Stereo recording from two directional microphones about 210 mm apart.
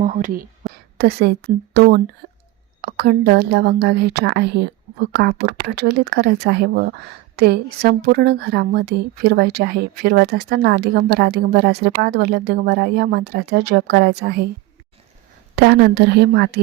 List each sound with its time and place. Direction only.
0.0 s a woman's voice: 40° right (ahead or behind)
2.2 s a sound: 35° right (ahead or behind)
2.8 s a woman's voice: 50° right (ahead or behind)
15.5 s a woman's voice: 55° right (ahead or behind)